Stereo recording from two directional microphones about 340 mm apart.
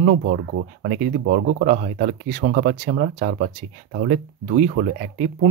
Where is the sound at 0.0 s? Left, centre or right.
Right.